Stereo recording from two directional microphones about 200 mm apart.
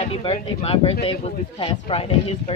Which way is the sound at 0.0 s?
30° left (ahead or behind).